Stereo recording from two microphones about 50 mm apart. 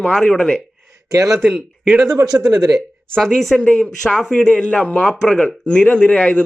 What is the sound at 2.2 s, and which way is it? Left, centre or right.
Speech, right.